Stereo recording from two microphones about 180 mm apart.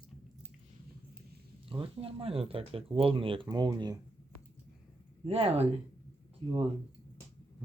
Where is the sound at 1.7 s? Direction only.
30° right (ahead or behind).